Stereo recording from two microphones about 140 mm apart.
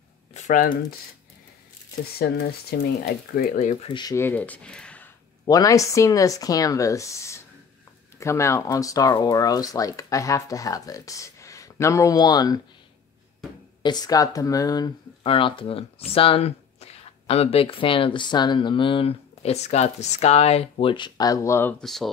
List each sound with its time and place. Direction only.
0.3 s a sound: 60° left (ahead or behind)
3.3 s speech: 60° left (ahead or behind)
3.9 s speech: 30° left (ahead or behind)
4.2 s a sound: 10° left (ahead or behind)
5.5 s speech: 25° left (ahead or behind)
13.8 s speech: 30° left (ahead or behind)
15.2 s speech: 40° left (ahead or behind); by 21.7 s 20° left (ahead or behind)
21.7 s speech: centre (ahead or behind)